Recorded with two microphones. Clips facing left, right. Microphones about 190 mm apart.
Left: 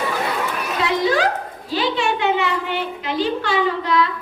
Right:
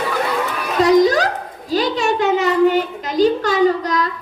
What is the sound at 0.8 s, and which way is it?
Music, 40° right (ahead or behind).